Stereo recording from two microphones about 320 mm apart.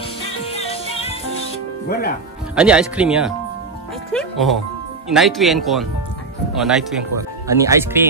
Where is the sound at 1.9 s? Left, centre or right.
Left.